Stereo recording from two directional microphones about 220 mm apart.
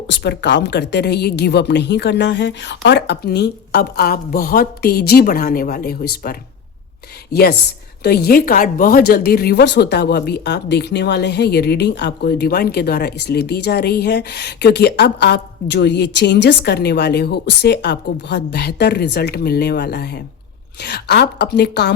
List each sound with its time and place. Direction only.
0.1 s speech: 50° left (ahead or behind)
8.0 s speech: 45° left (ahead or behind)